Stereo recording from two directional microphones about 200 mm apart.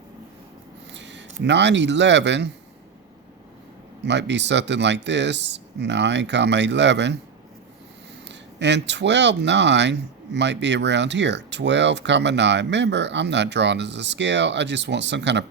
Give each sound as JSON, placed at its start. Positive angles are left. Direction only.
{"t": 0.9, "sound": "speech", "side_deg": -65}
{"t": 4.0, "sound": "speech", "side_deg": -60}
{"t": 8.3, "sound": "speech", "side_deg": -60}